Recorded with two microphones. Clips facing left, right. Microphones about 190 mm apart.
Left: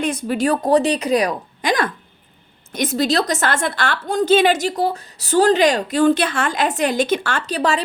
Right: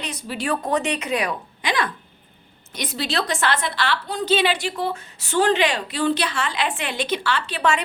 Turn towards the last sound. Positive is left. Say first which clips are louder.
# left 2 dB
turn(degrees=40)  # may be behind; listen again after turning